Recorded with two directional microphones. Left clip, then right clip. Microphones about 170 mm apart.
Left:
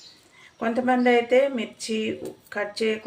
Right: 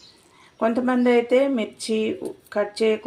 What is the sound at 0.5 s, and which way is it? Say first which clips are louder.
Speech: right 1 dB; 30° right (ahead or behind).